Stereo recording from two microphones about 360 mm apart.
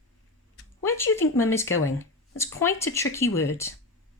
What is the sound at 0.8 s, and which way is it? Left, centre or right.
Speech, centre.